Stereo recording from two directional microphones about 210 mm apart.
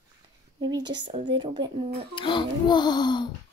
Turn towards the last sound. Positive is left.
turn(degrees=20)  # may be behind; listen again after turning